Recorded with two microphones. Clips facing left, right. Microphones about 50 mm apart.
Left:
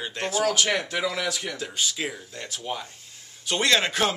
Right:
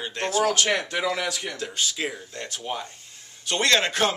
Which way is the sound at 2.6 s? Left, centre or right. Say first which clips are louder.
Right 1 dB; centre.